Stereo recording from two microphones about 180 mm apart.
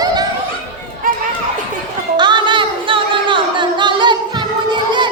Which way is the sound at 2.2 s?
25° right (ahead or behind).